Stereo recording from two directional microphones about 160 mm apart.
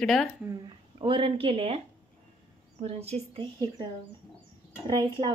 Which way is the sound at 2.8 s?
40° right (ahead or behind).